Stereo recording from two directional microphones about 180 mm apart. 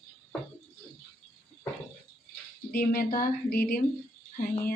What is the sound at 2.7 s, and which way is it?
Speech, 55° left (ahead or behind).